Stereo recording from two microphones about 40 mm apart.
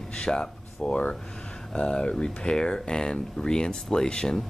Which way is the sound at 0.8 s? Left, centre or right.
Left.